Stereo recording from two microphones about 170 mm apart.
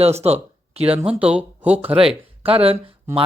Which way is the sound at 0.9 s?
5° right (ahead or behind).